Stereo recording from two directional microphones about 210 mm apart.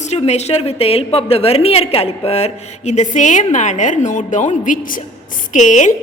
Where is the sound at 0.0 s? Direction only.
30° left (ahead or behind).